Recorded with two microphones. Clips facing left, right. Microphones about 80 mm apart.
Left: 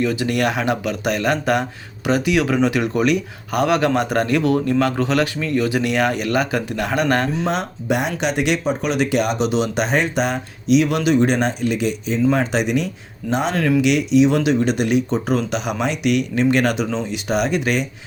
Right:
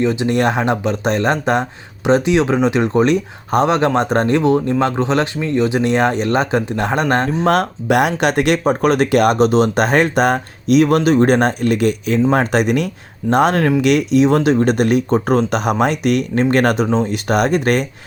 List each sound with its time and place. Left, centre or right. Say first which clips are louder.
0.0 s speech: right 4 dB; right
7.4 s speech: right 6 dB; right